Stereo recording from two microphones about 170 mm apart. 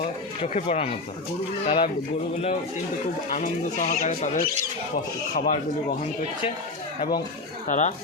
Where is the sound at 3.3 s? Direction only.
45° left (ahead or behind).